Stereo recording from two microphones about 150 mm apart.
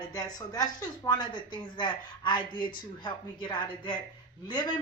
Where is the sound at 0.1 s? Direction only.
25° left (ahead or behind).